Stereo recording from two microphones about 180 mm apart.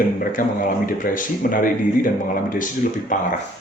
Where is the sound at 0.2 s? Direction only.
50° left (ahead or behind).